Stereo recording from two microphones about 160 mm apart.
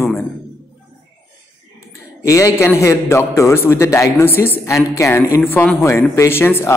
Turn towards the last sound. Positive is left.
turn(degrees=15)  # may be behind; listen again after turning